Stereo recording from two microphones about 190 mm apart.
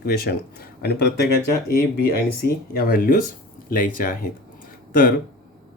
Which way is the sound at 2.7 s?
50° left (ahead or behind).